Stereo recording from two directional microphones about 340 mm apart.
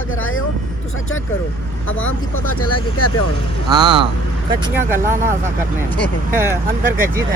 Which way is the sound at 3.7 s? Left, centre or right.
Centre.